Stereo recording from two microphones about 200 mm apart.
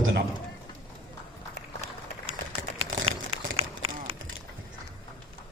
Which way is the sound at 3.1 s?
30° right (ahead or behind).